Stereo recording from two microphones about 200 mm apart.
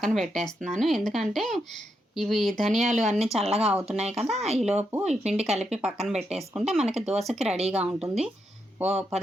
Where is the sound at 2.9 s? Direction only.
35° right (ahead or behind).